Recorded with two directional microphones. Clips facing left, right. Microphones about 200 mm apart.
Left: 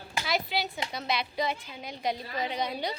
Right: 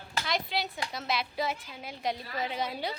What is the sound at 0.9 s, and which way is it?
A woman's voice, centre (ahead or behind).